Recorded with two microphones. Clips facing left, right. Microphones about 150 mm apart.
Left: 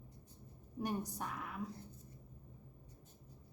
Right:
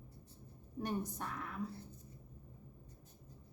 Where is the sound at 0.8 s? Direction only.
10° left (ahead or behind).